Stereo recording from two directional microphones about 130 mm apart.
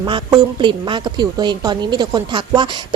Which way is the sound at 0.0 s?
35° right (ahead or behind).